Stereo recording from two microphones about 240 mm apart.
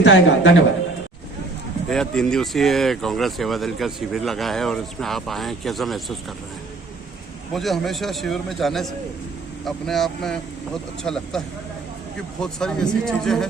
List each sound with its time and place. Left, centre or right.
0.0 s a man's voice: left
1.9 s speech: centre
7.5 s speech: centre